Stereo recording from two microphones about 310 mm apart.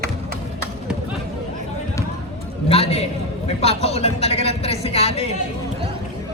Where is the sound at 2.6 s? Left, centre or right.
Centre.